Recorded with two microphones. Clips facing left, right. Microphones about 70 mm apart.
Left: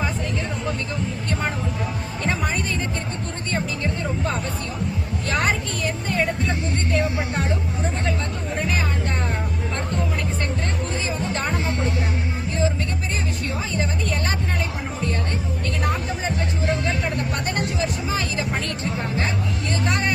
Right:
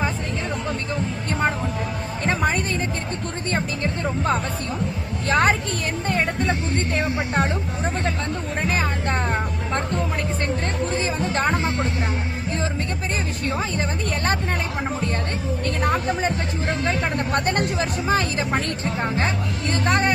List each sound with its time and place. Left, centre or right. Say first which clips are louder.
5.3 s vehicle: right 4 dB; right
6.9 s music: even; right
8.6 s music: right 3 dB; right
15.8 s music: right 5 dB; right
19.7 s music: right 4 dB; right